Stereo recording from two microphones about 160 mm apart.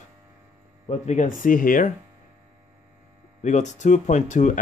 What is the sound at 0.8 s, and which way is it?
Speech, 45° left (ahead or behind).